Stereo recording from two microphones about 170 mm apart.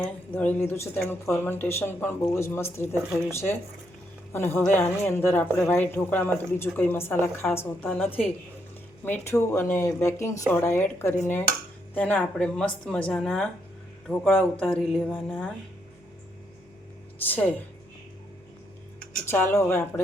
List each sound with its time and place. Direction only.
0.0 s speech: 10° left (ahead or behind)
17.2 s speech: 10° left (ahead or behind)
19.1 s speech: 10° left (ahead or behind)